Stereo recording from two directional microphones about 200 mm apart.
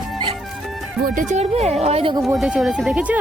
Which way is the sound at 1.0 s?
40° right (ahead or behind).